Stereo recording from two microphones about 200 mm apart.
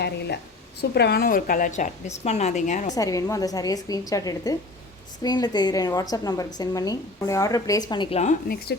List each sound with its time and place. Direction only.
0.8 s a woman's voice: 55° left (ahead or behind); by 2.9 s 35° left (ahead or behind)
2.9 s a woman's voice: 15° left (ahead or behind)